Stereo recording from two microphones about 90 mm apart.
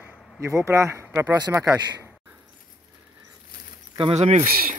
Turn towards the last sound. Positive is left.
turn(degrees=-85)